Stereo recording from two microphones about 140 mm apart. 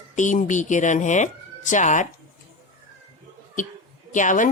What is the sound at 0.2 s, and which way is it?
A woman's voice, 65° left (ahead or behind).